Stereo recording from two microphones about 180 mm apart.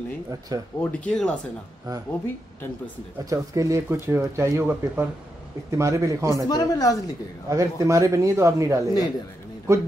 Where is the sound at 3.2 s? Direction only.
15° right (ahead or behind).